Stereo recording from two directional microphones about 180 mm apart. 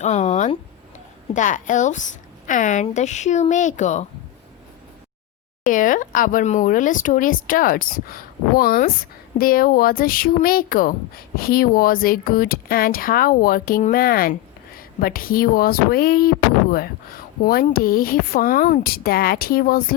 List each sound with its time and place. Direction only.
0.0 s speech: 40° left (ahead or behind)
5.6 s speech: 45° left (ahead or behind)